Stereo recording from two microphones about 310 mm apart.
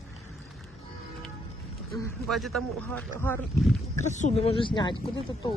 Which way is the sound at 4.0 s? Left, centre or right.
Left.